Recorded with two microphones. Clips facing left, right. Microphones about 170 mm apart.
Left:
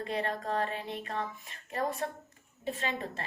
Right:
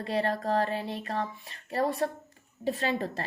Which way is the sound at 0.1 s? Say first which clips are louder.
Right 6 dB; 35° right (ahead or behind).